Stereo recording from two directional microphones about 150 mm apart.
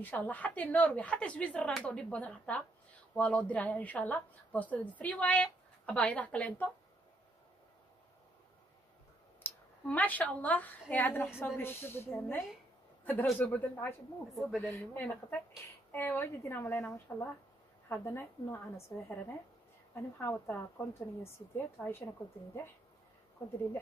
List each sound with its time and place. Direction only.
0.0 s a woman's voice: 10° left (ahead or behind)
9.4 s a woman's voice: 10° left (ahead or behind)
14.3 s speech: centre (ahead or behind)
15.0 s a woman's voice: 15° left (ahead or behind)